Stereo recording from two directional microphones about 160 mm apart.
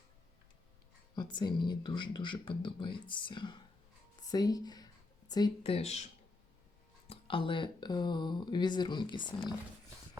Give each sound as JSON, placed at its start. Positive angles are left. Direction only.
{"t": 1.1, "sound": "speech", "side_deg": 25}
{"t": 5.6, "sound": "speech", "side_deg": 40}
{"t": 7.1, "sound": "speech", "side_deg": 35}